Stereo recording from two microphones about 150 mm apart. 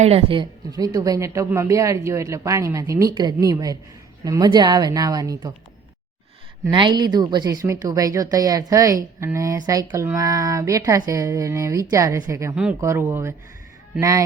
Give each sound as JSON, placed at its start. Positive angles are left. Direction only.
{"t": 0.0, "sound": "a woman's voice", "side_deg": -40}
{"t": 0.7, "sound": "a woman's voice", "side_deg": -25}
{"t": 6.7, "sound": "a woman's voice", "side_deg": -30}